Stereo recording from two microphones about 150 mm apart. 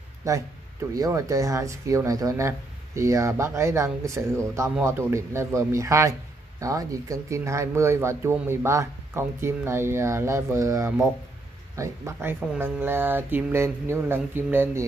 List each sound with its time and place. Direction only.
0.2 s speech: 20° right (ahead or behind)